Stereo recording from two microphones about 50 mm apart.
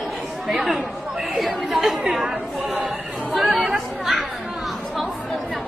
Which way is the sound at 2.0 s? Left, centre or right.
Centre.